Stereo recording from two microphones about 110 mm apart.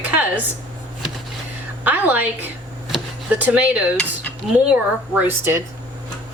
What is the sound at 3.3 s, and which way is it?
A woman's voice, 15° right (ahead or behind).